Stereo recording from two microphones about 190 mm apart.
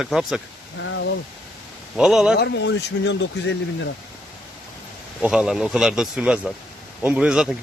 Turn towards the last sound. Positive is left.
turn(degrees=-5)  # may be behind; listen again after turning